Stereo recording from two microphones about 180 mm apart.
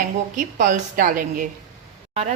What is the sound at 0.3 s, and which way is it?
Speech, 45° right (ahead or behind).